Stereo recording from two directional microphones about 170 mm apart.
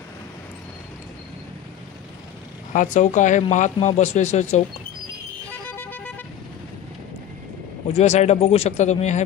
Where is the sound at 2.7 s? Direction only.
45° left (ahead or behind).